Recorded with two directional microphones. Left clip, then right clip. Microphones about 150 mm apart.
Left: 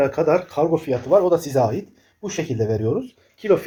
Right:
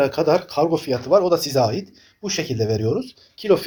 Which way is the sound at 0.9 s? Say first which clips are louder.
Left 1 dB; 5° right (ahead or behind).